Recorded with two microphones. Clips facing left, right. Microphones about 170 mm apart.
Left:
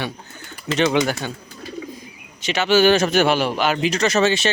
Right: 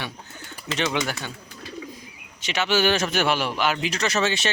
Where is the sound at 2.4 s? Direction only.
40° left (ahead or behind).